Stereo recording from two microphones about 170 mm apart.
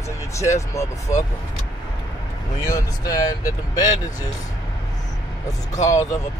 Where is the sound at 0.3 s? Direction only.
15° left (ahead or behind).